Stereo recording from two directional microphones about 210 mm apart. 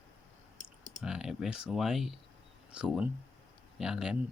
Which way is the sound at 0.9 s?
5° right (ahead or behind).